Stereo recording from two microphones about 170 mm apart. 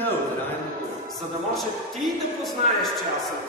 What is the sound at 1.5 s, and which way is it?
A man's voice, centre (ahead or behind).